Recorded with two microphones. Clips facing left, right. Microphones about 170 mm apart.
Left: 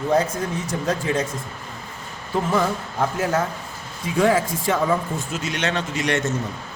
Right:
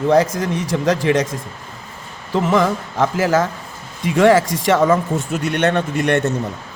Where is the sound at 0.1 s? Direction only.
90° right.